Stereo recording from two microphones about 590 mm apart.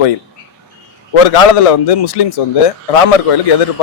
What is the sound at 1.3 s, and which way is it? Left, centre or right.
A man's voice, left.